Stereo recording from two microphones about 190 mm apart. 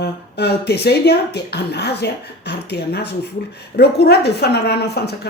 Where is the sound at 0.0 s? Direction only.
60° left (ahead or behind).